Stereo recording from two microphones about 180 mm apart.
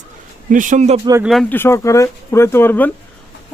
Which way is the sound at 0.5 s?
45° right (ahead or behind).